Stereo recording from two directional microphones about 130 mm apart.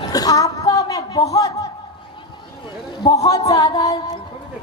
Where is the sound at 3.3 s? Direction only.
25° left (ahead or behind).